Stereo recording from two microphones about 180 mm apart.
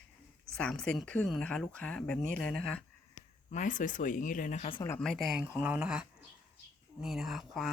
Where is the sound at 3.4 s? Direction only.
45° left (ahead or behind).